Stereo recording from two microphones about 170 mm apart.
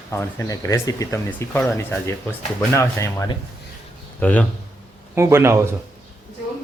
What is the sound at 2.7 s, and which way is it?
A man's voice, 15° left (ahead or behind).